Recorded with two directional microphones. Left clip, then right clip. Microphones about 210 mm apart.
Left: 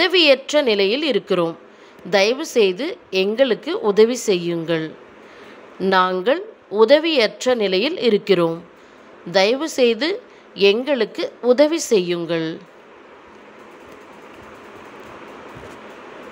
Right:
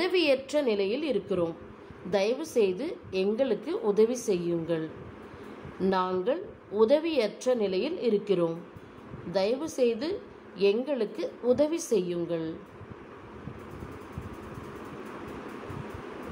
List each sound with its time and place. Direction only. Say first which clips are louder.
0.0 s a woman's voice: left 11 dB; 10° left (ahead or behind)